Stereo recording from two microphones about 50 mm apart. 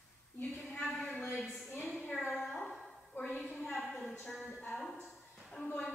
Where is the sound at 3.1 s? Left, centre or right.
Left.